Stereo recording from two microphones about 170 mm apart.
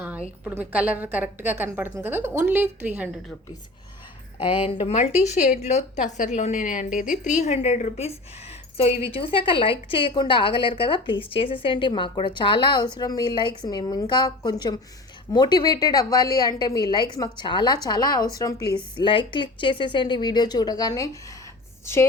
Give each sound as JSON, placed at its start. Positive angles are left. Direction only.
{"t": 0.4, "sound": "a woman's voice", "side_deg": -10}
{"t": 4.4, "sound": "a woman's voice", "side_deg": 35}